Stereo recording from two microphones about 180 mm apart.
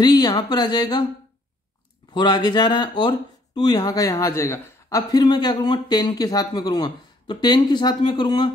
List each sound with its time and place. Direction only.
0.0 s speech: 25° left (ahead or behind)
2.1 s speech: 25° left (ahead or behind)